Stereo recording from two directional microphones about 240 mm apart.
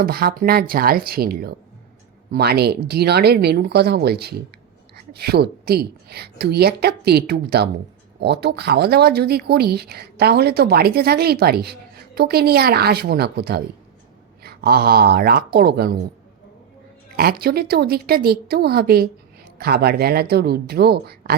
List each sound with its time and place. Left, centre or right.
0.0 s speech: right
17.2 s speech: right